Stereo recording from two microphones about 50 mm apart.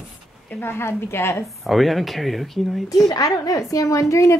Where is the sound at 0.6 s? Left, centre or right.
Left.